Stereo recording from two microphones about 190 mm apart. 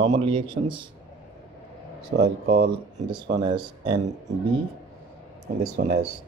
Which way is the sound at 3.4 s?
25° right (ahead or behind).